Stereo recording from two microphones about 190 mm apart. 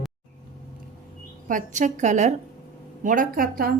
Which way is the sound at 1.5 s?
45° right (ahead or behind).